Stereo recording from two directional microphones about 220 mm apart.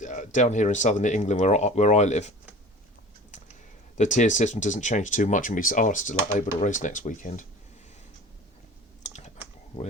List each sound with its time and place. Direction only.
0.0 s speech: 35° left (ahead or behind)
3.9 s speech: 35° left (ahead or behind)